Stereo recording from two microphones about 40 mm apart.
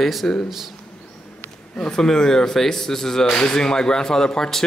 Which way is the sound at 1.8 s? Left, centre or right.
Centre.